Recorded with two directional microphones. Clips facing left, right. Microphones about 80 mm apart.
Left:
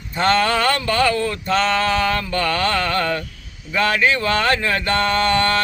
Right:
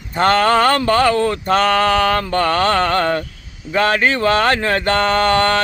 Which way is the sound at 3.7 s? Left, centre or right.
Right.